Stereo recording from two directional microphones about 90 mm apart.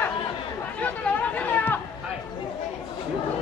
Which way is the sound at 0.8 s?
15° left (ahead or behind).